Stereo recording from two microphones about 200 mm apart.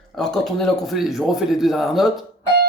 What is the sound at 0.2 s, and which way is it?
Speech, centre (ahead or behind).